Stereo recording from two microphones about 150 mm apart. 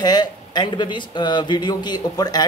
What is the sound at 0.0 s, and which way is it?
Speech, 25° left (ahead or behind).